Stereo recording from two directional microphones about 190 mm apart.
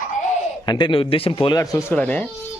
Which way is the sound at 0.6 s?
25° left (ahead or behind).